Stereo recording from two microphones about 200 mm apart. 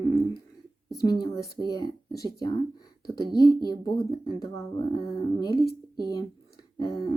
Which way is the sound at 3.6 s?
20° left (ahead or behind).